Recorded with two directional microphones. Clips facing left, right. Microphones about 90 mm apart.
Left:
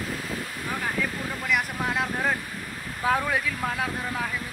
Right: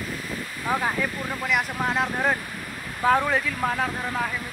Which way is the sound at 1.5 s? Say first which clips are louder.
Right 2 dB; centre (ahead or behind).